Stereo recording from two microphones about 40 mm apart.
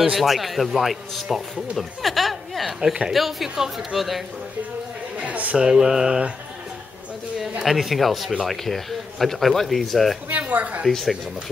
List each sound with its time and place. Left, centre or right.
0.2 s speech: centre
1.8 s a sound: centre
2.8 s mantra: centre
3.1 s speech: centre
5.1 s a sound: right
5.6 s mantra: centre
7.6 s speech: centre
10.3 s speech: right
10.9 s speech: centre